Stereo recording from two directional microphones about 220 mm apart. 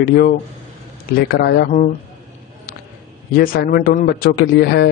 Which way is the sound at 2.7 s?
45° left (ahead or behind).